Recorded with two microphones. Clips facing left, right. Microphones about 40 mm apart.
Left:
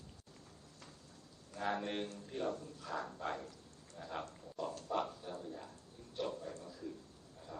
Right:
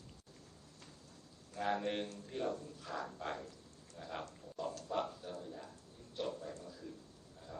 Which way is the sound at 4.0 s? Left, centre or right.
Left.